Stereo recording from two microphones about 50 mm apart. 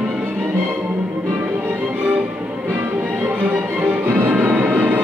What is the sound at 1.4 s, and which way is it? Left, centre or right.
Music, right.